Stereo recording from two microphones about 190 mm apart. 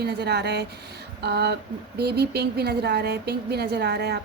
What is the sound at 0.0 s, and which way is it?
A woman's voice, 60° right (ahead or behind).